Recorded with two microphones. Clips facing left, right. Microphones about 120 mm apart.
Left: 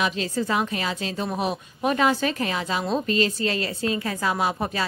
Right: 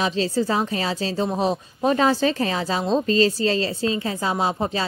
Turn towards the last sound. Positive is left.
turn(degrees=-25)  # may be behind; listen again after turning